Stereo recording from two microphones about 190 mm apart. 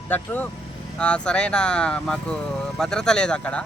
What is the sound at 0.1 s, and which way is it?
Speech, 10° left (ahead or behind).